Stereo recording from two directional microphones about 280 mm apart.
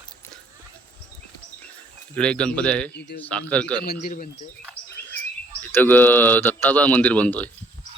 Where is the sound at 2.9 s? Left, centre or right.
Left.